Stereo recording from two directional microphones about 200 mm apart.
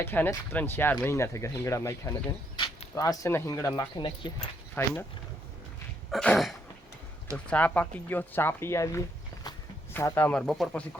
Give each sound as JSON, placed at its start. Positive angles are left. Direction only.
{"t": 0.0, "sound": "speech", "side_deg": 10}
{"t": 4.7, "sound": "speech", "side_deg": 10}
{"t": 6.1, "sound": "cough", "side_deg": 0}
{"t": 7.3, "sound": "speech", "side_deg": 5}